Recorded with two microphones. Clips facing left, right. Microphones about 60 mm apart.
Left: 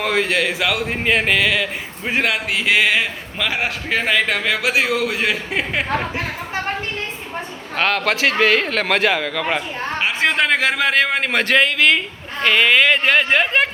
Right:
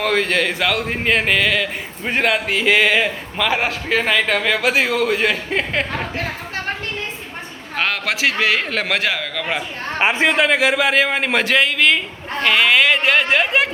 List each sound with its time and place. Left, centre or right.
0.0 s a man's voice: centre
7.8 s a man's voice: centre
10.0 s speech: right
10.2 s a man's voice: centre